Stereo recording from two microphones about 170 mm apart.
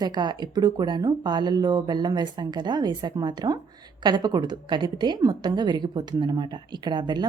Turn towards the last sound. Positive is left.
turn(degrees=-25)  # may be behind; listen again after turning